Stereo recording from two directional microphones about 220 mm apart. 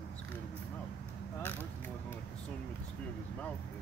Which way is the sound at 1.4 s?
10° left (ahead or behind).